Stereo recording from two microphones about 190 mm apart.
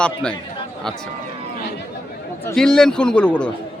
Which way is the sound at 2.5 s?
5° left (ahead or behind).